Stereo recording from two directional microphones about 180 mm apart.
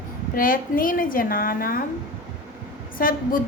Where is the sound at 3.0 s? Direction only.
50° left (ahead or behind).